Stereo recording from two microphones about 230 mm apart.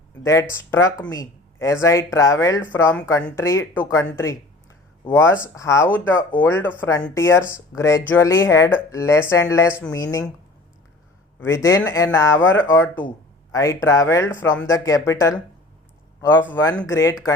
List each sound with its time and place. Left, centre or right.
0.2 s speech: centre
11.3 s speech: centre